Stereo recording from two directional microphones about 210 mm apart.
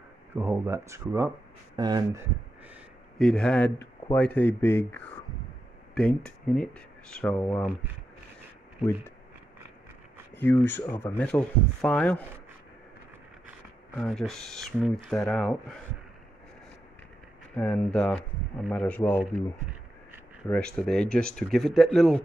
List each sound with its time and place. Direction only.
0.3 s speech: 10° right (ahead or behind)
2.7 s speech: 5° left (ahead or behind)
10.3 s speech: 10° left (ahead or behind)
13.9 s speech: 5° left (ahead or behind)
17.6 s speech: 5° left (ahead or behind)
20.4 s speech: 5° left (ahead or behind)